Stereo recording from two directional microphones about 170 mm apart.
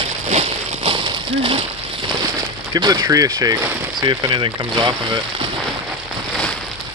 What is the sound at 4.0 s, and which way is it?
Speech, 25° right (ahead or behind).